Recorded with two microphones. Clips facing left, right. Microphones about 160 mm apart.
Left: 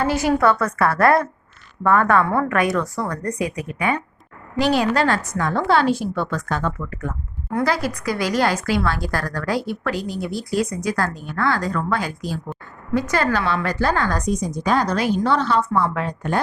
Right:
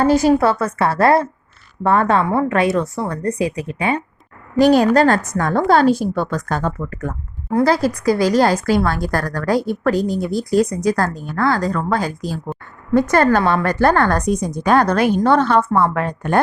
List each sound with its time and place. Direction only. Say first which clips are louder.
0.0 s a woman's voice: right 5 dB; 35° right (ahead or behind)
4.5 s a woman's voice: right 7 dB; 45° right (ahead or behind)